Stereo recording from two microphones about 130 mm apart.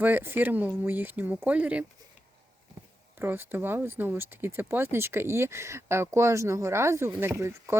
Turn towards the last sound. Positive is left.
turn(degrees=-20)  # may be behind; listen again after turning